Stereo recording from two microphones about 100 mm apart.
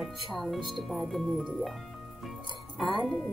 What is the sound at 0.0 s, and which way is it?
Speech, centre (ahead or behind).